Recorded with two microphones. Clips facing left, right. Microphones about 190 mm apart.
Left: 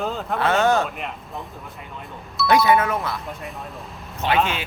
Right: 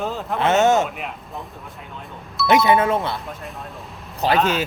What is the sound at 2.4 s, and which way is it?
Speech, 25° right (ahead or behind).